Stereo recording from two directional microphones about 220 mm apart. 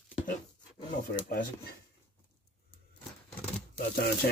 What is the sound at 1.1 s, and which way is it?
Speech, 40° left (ahead or behind).